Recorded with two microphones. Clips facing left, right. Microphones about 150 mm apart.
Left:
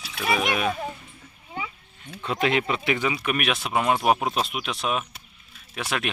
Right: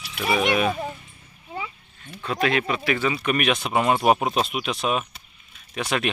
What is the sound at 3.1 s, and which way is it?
Speech, 5° left (ahead or behind).